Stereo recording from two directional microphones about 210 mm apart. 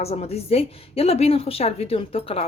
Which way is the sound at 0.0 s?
30° left (ahead or behind).